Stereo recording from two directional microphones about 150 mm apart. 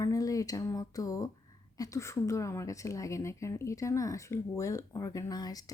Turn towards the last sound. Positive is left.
turn(degrees=25)  # may be behind; listen again after turning